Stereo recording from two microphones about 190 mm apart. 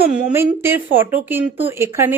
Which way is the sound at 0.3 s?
10° right (ahead or behind).